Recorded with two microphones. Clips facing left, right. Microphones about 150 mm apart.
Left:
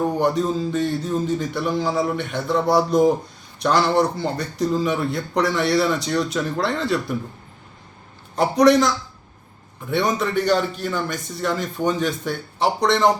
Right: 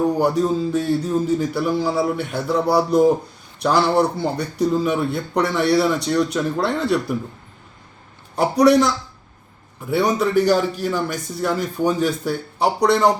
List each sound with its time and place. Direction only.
0.2 s a man's voice: 5° right (ahead or behind)
8.4 s a man's voice: 5° right (ahead or behind)
9.9 s a man's voice: 5° right (ahead or behind)